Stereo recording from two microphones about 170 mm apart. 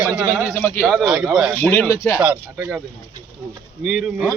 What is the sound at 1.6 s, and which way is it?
Speech, 10° left (ahead or behind).